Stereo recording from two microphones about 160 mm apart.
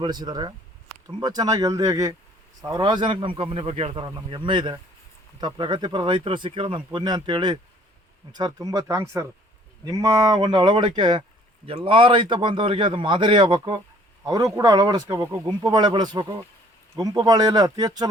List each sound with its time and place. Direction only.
0.0 s a man's voice: 25° right (ahead or behind)